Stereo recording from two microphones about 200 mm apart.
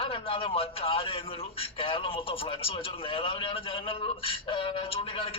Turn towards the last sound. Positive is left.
turn(degrees=30)  # may be behind; listen again after turning